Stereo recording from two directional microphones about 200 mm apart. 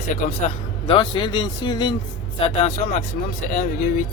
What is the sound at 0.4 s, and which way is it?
Speech, 25° left (ahead or behind).